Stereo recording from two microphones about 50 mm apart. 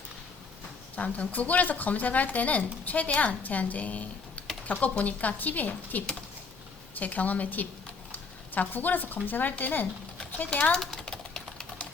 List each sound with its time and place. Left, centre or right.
0.9 s speech: left
7.0 s speech: left
10.5 s speech: left
11.0 s typewriter: centre